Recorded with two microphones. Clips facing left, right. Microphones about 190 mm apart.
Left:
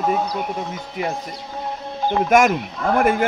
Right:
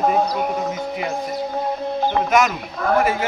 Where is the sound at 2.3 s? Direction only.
50° left (ahead or behind).